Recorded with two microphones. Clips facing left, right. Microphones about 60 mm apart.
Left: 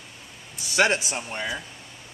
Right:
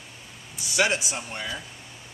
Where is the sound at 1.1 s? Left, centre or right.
Left.